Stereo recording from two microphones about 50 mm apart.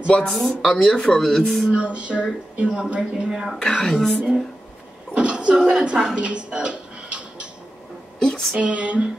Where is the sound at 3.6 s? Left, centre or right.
Centre.